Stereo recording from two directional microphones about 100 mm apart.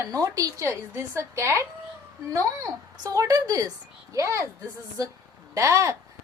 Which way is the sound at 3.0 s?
35° right (ahead or behind).